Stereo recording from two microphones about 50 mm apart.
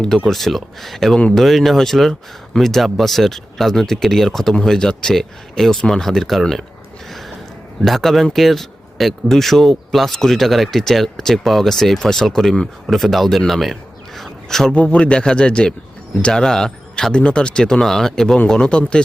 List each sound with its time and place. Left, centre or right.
0.3 s speech: centre
7.9 s speech: centre
14.2 s a sound: centre
14.7 s a man's voice: left